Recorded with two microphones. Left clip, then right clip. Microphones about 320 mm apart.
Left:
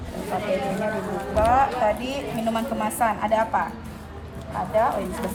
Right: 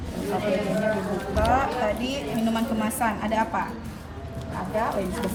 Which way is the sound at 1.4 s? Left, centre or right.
Centre.